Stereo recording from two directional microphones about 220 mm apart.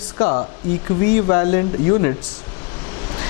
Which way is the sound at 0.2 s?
25° left (ahead or behind).